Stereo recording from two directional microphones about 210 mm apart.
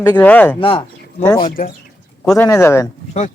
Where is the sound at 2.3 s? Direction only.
15° left (ahead or behind).